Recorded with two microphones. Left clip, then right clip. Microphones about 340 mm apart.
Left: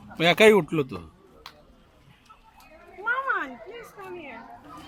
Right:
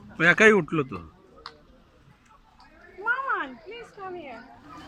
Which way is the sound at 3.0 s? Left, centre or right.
Centre.